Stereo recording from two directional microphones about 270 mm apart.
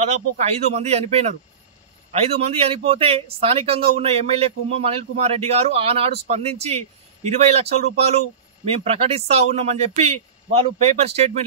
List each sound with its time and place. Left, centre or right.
0.0 s a man's voice: right